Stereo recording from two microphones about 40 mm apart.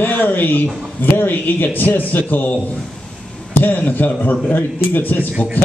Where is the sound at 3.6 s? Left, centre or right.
Left.